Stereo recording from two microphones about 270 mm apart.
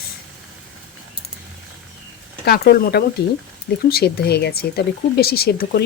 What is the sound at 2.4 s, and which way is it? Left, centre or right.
Speech, left.